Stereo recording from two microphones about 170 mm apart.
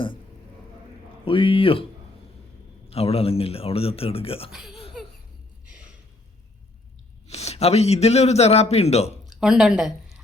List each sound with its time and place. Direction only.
1.2 s a man's voice: 30° left (ahead or behind)
2.9 s a man's voice: 35° left (ahead or behind)
4.5 s speech: 5° right (ahead or behind)
7.3 s a man's voice: 40° left (ahead or behind)
9.2 s speech: centre (ahead or behind)